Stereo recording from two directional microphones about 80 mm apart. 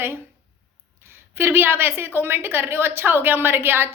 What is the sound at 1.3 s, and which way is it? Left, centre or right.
A woman's voice, right.